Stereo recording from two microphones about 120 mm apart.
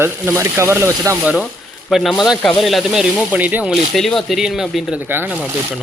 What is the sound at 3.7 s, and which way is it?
Speech, centre (ahead or behind).